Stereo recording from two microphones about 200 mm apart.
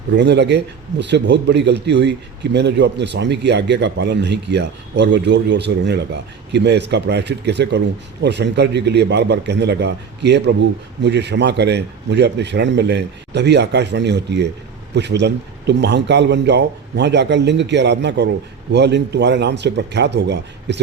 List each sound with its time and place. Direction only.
0.2 s speech: 60° right (ahead or behind)